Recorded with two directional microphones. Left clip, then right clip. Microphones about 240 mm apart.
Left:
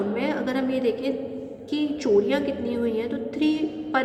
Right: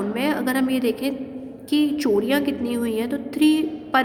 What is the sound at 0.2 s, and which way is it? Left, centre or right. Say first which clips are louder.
A woman's voice: right 3 dB; right.